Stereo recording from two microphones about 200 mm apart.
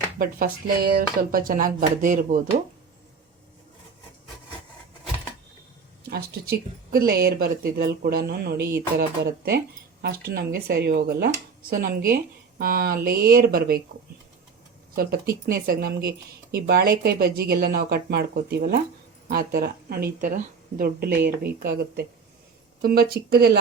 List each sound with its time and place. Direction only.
0.2 s speech: 45° right (ahead or behind)
6.1 s speech: 50° right (ahead or behind)
14.9 s speech: 50° right (ahead or behind)